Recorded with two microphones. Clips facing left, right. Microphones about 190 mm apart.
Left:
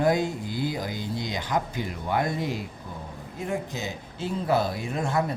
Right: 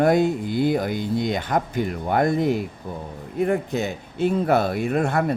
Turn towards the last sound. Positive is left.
turn(degrees=-60)  # may be behind; listen again after turning